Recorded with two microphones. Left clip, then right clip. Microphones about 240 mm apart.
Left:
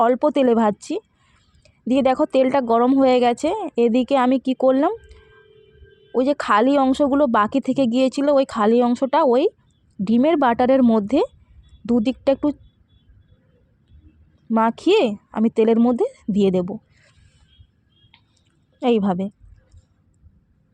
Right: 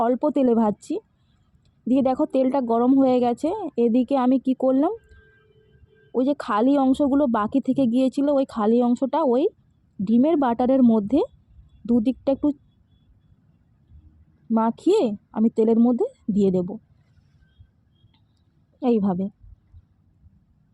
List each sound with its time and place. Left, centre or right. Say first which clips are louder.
0.0 s speech: left 4 dB; left
6.1 s speech: left 5 dB; left
14.5 s speech: left 3 dB; left
18.8 s speech: left 3 dB; left